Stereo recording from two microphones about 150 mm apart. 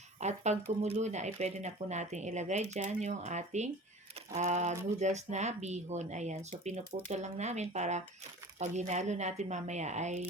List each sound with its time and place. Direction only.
0.2 s speech: 50° right (ahead or behind)